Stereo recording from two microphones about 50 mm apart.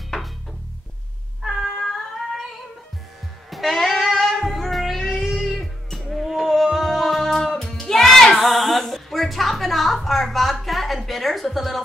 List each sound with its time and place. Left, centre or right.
1.4 s cat: centre
3.4 s music: centre
8.4 s music: centre